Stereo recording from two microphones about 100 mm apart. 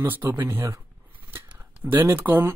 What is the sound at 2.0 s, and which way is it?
Speech, 20° right (ahead or behind).